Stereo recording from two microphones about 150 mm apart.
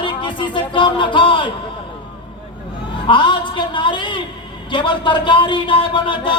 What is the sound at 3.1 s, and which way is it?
Speech, 30° left (ahead or behind).